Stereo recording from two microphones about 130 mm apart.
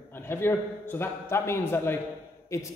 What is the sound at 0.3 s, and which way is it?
A man's voice, 20° left (ahead or behind).